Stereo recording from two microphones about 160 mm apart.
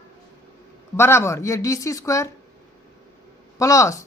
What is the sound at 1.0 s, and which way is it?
Speech, 15° left (ahead or behind).